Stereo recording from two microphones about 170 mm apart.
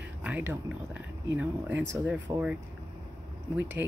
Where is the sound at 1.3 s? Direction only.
10° right (ahead or behind).